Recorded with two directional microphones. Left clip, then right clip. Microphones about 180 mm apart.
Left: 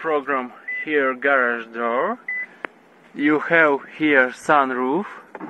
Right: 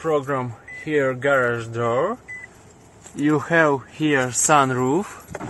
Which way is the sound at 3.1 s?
10° right (ahead or behind).